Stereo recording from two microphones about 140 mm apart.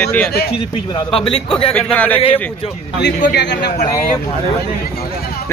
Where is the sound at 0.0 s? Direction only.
10° left (ahead or behind).